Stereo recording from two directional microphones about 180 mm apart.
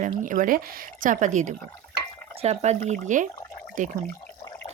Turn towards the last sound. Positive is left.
turn(degrees=-45)  # may be behind; listen again after turning